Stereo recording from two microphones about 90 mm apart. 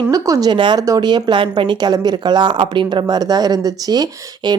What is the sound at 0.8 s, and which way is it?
Speech, 45° right (ahead or behind).